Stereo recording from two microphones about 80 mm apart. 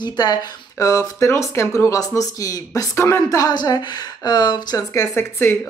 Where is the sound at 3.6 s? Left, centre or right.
Left.